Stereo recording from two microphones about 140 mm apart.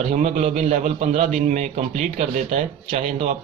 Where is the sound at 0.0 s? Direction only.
55° right (ahead or behind).